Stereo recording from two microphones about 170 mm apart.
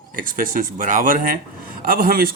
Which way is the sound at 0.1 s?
55° right (ahead or behind).